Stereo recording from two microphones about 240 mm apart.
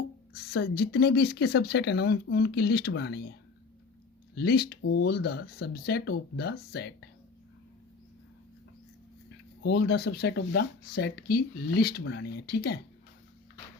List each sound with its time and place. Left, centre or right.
0.3 s speech: left
4.4 s speech: left
9.6 s speech: left